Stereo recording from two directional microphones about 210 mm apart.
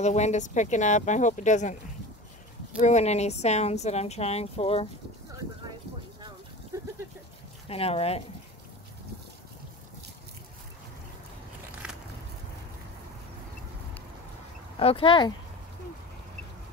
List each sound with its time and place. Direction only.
0.0 s speech: 35° left (ahead or behind)
2.8 s speech: 35° left (ahead or behind)
6.2 s a sound: 15° right (ahead or behind)
7.6 s speech: 30° left (ahead or behind)
14.8 s speech: 25° left (ahead or behind)